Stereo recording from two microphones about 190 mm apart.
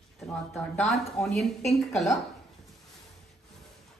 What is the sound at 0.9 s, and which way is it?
A woman's voice, centre (ahead or behind).